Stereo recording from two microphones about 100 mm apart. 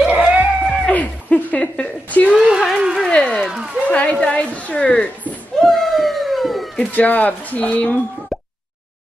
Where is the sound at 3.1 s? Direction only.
10° left (ahead or behind).